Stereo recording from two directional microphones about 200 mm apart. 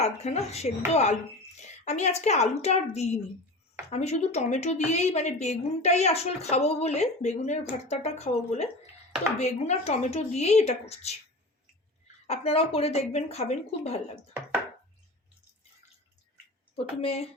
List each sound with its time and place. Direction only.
0.0 s a woman's voice: 35° left (ahead or behind)
12.3 s a woman's voice: 30° left (ahead or behind)
16.7 s speech: 30° left (ahead or behind)